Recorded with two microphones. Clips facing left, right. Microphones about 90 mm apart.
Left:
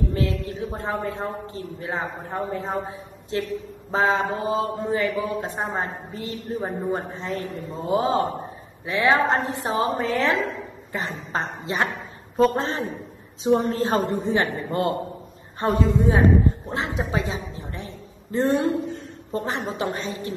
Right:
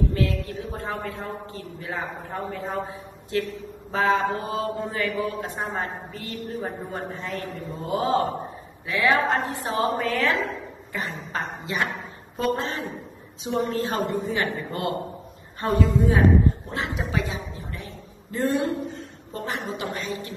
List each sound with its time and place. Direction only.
0.1 s a man's voice: 25° left (ahead or behind)
16.7 s a sound: 20° left (ahead or behind)
19.3 s a man's voice: 30° left (ahead or behind)